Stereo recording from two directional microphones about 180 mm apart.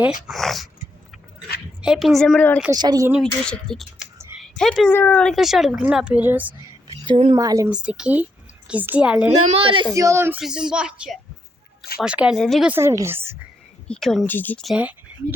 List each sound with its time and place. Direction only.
0.3 s speech: centre (ahead or behind)
1.8 s speech: 5° right (ahead or behind)
2.7 s a woman's voice: 20° right (ahead or behind)
3.4 s speech: 5° left (ahead or behind)
4.4 s a sound: 5° left (ahead or behind)
4.9 s speech: 5° left (ahead or behind)
6.9 s a woman's voice: 30° right (ahead or behind)
7.3 s speech: 20° right (ahead or behind)
7.7 s a woman's voice: 5° right (ahead or behind)
9.5 s a woman's voice: 30° right (ahead or behind); by 12.7 s centre (ahead or behind)
12.7 s speech: 15° right (ahead or behind)
13.8 s speech: 5° left (ahead or behind)